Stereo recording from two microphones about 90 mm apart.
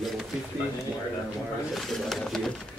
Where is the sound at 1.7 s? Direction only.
Centre (ahead or behind).